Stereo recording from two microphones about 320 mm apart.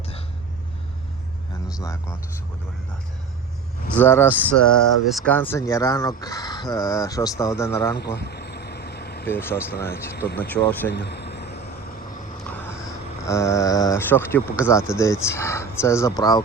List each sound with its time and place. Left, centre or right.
1.8 s speech: centre
3.9 s speech: centre
7.9 s vehicle: left
9.2 s speech: centre
10.9 s vehicle: left
12.5 s a sound: centre
13.2 s speech: centre